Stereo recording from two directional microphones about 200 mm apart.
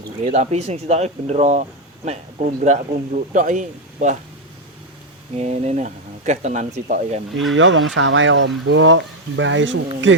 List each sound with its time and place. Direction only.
0.3 s speech: 35° right (ahead or behind)
5.4 s speech: 35° right (ahead or behind)
7.5 s speech: 70° right (ahead or behind)